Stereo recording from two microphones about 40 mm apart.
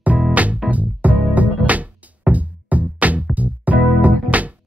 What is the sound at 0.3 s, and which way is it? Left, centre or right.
Music, right.